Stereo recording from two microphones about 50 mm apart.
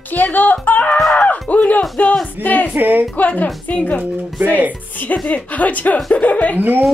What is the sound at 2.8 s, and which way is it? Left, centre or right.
Speech, right.